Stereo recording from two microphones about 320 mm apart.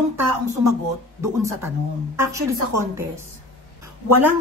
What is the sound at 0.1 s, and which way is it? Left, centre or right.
Speech, right.